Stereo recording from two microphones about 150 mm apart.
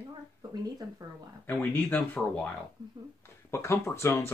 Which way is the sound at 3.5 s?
20° left (ahead or behind).